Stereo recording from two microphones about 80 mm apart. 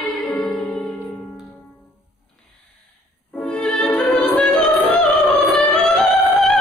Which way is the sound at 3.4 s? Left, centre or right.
Centre.